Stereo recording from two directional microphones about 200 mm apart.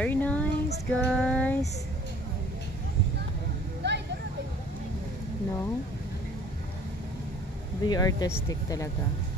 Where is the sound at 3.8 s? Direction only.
60° right (ahead or behind).